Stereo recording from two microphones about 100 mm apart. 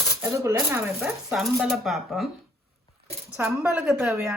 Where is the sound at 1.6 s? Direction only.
Centre (ahead or behind).